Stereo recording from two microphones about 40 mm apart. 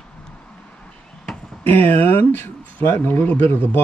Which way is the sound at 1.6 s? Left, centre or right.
Left.